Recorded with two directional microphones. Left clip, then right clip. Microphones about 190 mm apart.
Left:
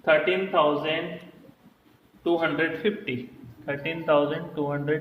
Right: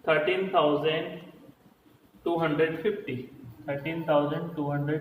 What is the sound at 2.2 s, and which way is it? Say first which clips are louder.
Speech: left 2 dB; 55° left (ahead or behind).